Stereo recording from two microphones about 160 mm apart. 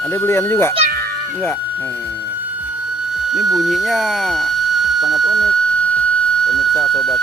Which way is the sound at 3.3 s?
Centre (ahead or behind).